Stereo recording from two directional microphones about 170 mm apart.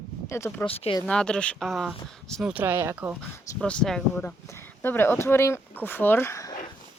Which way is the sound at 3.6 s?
5° left (ahead or behind).